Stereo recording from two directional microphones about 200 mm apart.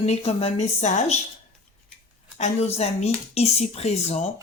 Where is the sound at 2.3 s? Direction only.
35° left (ahead or behind).